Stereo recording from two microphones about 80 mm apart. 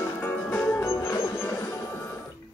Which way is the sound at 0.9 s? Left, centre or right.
Left.